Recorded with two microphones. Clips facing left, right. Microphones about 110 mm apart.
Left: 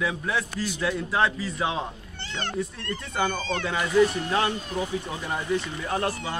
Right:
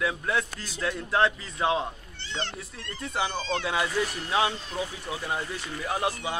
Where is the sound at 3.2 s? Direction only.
50° left (ahead or behind).